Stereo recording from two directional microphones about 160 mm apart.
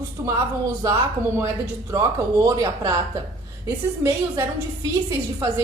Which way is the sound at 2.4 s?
20° right (ahead or behind).